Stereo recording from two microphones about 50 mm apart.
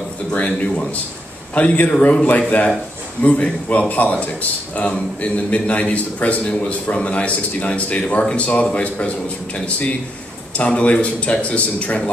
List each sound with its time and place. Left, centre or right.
0.3 s a man's voice: left
10.6 s a man's voice: left